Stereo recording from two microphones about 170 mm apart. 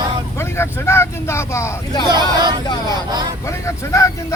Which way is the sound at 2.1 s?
25° right (ahead or behind).